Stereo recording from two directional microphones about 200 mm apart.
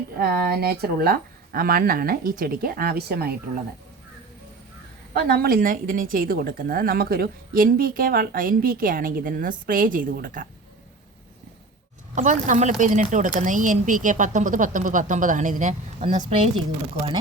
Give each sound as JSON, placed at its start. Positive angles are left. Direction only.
{"t": 0.2, "sound": "a woman's voice", "side_deg": -50}
{"t": 5.1, "sound": "a woman's voice", "side_deg": -50}
{"t": 12.1, "sound": "speech", "side_deg": -40}